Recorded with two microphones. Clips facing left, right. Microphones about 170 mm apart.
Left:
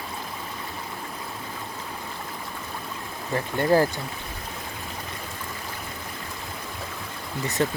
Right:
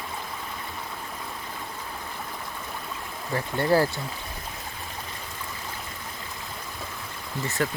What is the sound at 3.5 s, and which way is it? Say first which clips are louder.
Speech: left 2 dB; 15° left (ahead or behind).